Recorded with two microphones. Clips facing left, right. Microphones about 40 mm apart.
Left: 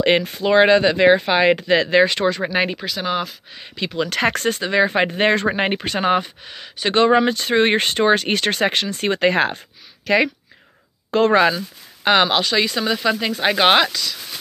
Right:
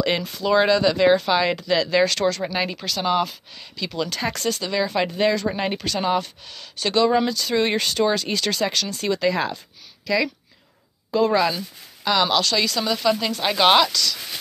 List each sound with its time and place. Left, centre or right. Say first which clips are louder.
0.0 s speech: left 5 dB; left
2.1 s speech: left 2 dB; left
2.4 s speech: left 5 dB; left
2.8 s speech: right 1 dB; centre
3.5 s speech: left 7 dB; left
4.1 s speech: left 6 dB; left
6.2 s speech: left 3 dB; left
6.9 s a woman's voice: left 4 dB; left
12.0 s speech: left 4 dB; left
12.4 s speech: left 2 dB; left